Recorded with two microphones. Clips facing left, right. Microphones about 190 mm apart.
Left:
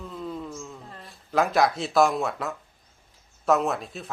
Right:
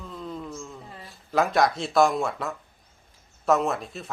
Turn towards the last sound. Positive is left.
turn(degrees=0)  # may be behind; listen again after turning